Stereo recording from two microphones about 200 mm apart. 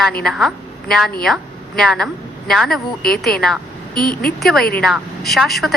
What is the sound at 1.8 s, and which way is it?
Speech, centre (ahead or behind).